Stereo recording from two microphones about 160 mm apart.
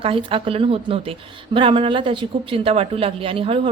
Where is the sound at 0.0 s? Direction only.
35° right (ahead or behind).